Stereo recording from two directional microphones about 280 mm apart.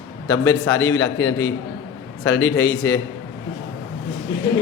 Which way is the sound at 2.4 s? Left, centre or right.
Left.